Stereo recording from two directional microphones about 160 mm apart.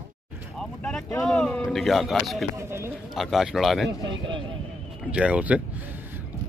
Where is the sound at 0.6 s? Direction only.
5° left (ahead or behind).